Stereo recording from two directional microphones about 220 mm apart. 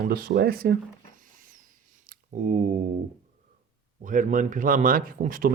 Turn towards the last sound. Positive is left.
turn(degrees=-40)  # may be behind; listen again after turning